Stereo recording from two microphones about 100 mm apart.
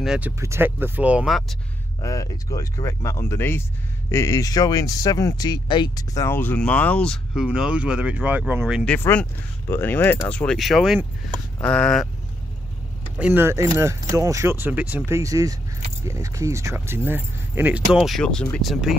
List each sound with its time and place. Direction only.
0.4 s speech: 25° right (ahead or behind)
1.2 s speech: centre (ahead or behind)
2.0 s speech: 35° left (ahead or behind)
6.1 s speech: 25° left (ahead or behind)
7.4 s speech: 10° right (ahead or behind)
8.8 s speech: 20° left (ahead or behind)
10.6 s speech: centre (ahead or behind)
11.6 s speech: 10° left (ahead or behind)
13.2 s speech: 20° right (ahead or behind)
14.7 s speech: 15° right (ahead or behind)
15.0 s speech: 30° right (ahead or behind); by 18.0 s 15° right (ahead or behind)
18.0 s speech: 5° left (ahead or behind)